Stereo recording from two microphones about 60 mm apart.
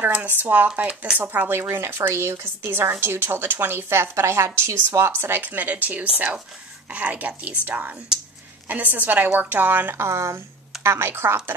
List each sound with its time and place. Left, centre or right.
0.0 s a woman's voice: right
8.1 s a sound: centre
8.6 s speech: right
10.0 s a woman's voice: right